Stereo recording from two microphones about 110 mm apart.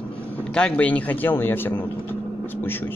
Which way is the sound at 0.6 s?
10° left (ahead or behind).